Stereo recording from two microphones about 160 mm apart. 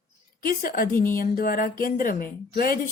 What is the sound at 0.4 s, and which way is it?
Speech, 65° left (ahead or behind).